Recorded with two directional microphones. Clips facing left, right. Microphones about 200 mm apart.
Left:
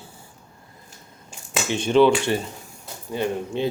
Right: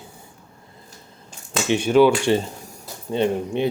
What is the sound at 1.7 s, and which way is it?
Speech, 10° right (ahead or behind).